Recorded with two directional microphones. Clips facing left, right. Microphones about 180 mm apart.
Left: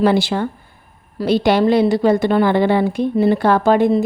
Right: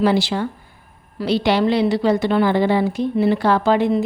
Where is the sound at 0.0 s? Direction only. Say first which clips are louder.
Left 2 dB; 55° left (ahead or behind).